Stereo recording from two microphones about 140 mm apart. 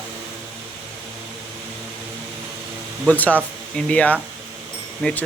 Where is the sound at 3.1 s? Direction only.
10° left (ahead or behind).